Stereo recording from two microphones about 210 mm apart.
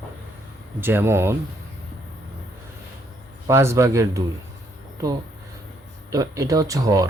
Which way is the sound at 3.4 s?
15° right (ahead or behind).